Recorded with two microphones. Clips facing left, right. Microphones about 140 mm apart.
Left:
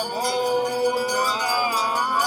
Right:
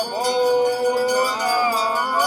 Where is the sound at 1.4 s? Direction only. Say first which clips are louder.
Right 4 dB; 45° right (ahead or behind).